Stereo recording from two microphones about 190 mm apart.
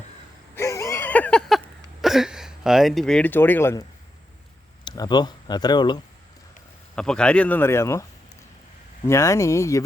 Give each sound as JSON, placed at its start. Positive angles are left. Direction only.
{"t": 0.5, "sound": "a sound", "side_deg": 15}
{"t": 4.9, "sound": "speech", "side_deg": 20}
{"t": 6.9, "sound": "speech", "side_deg": 5}
{"t": 9.0, "sound": "speech", "side_deg": 15}